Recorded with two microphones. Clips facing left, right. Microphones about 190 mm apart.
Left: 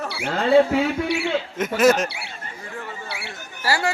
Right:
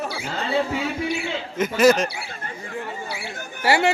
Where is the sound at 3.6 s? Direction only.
20° right (ahead or behind).